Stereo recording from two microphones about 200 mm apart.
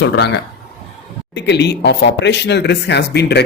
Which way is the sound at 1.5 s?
55° left (ahead or behind).